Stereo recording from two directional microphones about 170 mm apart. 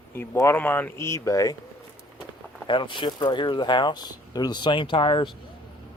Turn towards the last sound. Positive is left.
turn(degrees=30)  # may be behind; listen again after turning